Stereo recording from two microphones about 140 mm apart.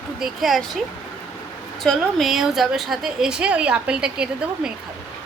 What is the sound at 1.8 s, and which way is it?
A woman's voice, centre (ahead or behind).